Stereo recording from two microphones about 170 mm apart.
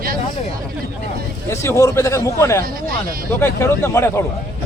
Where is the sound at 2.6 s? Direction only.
60° right (ahead or behind).